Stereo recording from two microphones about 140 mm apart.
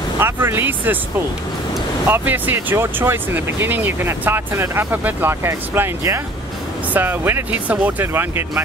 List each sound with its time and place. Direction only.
0.2 s speech: 15° right (ahead or behind)
2.0 s speech: 15° right (ahead or behind)